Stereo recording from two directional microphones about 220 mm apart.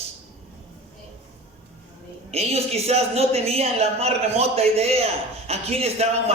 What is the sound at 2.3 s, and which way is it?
Speech, 30° right (ahead or behind).